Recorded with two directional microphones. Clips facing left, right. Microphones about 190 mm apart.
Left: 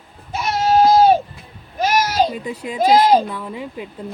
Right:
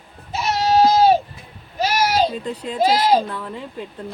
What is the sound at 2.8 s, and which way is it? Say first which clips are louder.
Speech: left 3 dB; 50° left (ahead or behind).